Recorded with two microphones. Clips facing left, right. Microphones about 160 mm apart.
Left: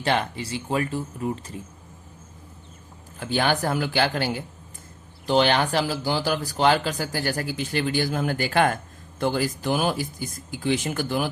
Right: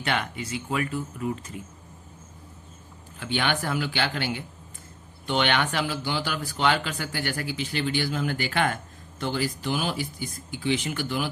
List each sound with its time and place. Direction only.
0.0 s speech: 30° left (ahead or behind)
3.2 s speech: 40° left (ahead or behind)